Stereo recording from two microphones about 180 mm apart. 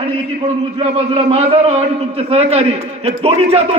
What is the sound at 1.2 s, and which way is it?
A man's voice, 35° right (ahead or behind).